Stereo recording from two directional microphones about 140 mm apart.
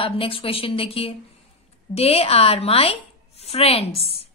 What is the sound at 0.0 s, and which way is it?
A woman's voice, 40° left (ahead or behind).